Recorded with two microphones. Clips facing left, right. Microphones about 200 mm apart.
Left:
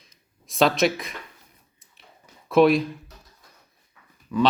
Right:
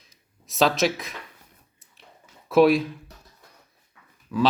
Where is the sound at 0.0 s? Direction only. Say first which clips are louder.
Even; centre (ahead or behind).